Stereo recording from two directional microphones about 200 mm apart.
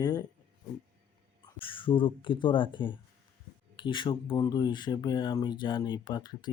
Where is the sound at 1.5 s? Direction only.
25° left (ahead or behind).